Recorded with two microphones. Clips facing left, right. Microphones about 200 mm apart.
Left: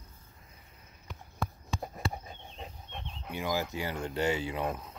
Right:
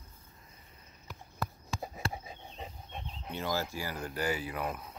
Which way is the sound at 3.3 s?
15° left (ahead or behind).